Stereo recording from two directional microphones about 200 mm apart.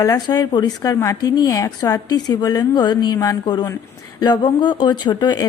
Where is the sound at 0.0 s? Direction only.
20° left (ahead or behind).